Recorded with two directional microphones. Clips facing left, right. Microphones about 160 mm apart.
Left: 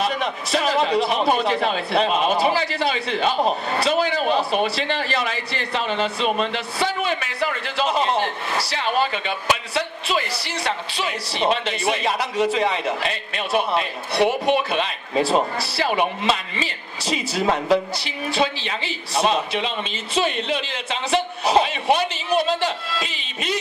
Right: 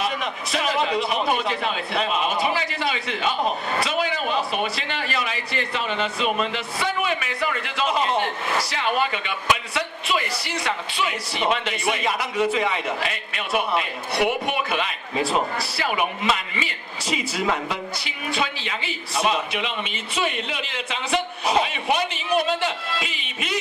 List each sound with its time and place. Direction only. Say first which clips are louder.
0.2 s a man's voice: left 4 dB; 35° left (ahead or behind)